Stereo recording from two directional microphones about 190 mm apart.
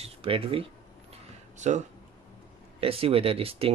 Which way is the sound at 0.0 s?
30° right (ahead or behind).